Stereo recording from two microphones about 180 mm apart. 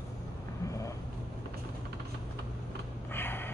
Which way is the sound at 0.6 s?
15° left (ahead or behind).